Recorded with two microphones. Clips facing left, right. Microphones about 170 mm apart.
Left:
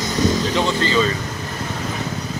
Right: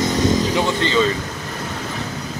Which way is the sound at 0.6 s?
20° right (ahead or behind).